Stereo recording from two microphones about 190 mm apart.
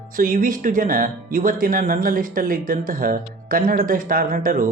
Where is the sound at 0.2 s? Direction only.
45° right (ahead or behind).